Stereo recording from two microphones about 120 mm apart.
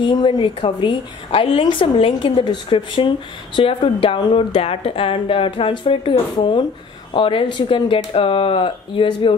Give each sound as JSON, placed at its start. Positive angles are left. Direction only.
{"t": 0.0, "sound": "a woman's voice", "side_deg": 45}